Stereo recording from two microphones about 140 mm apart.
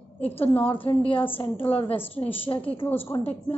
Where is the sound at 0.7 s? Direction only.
40° left (ahead or behind).